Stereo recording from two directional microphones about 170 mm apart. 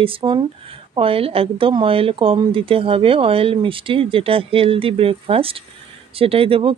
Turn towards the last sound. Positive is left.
turn(degrees=-30)  # may be behind; listen again after turning